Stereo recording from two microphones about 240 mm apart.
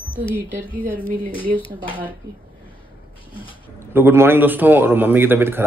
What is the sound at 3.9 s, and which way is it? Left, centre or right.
A man's voice, centre.